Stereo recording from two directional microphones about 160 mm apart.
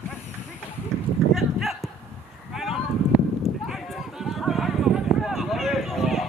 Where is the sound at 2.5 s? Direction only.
Centre (ahead or behind).